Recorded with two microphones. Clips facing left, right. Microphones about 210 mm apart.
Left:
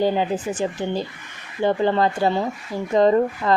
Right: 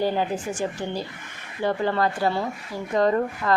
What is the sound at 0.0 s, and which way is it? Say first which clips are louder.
A woman's voice: left 3 dB; 20° left (ahead or behind).